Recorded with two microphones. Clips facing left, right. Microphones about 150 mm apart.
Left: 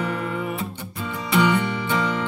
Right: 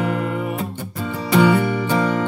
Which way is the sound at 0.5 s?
45° right (ahead or behind).